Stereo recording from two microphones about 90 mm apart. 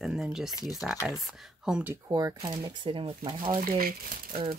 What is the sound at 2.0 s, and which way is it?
Speech, 45° right (ahead or behind).